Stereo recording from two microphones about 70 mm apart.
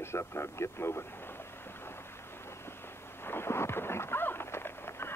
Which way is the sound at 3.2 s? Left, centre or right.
Left.